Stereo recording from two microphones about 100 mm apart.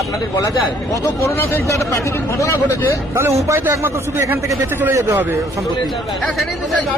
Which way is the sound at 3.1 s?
25° right (ahead or behind).